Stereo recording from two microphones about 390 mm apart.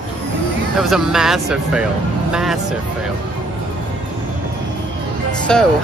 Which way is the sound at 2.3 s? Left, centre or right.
Centre.